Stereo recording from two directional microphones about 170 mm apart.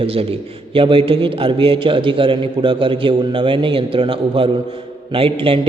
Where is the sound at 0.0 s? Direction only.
35° right (ahead or behind).